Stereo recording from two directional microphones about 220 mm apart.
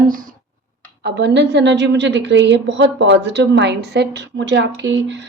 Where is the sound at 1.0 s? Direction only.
50° right (ahead or behind).